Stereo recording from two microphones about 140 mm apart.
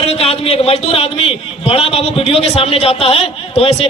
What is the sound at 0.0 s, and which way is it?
A man's voice, 45° left (ahead or behind).